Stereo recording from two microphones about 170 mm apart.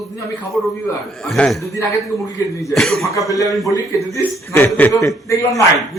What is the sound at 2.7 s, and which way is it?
Speech, centre (ahead or behind).